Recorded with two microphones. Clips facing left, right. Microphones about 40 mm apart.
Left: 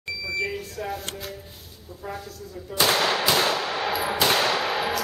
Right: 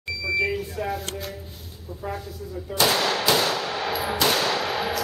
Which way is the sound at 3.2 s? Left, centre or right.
Centre.